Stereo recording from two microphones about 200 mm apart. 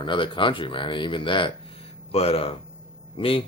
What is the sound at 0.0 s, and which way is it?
Speech, 25° left (ahead or behind).